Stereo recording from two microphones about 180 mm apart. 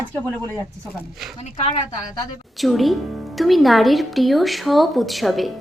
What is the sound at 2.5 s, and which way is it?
Speech, centre (ahead or behind).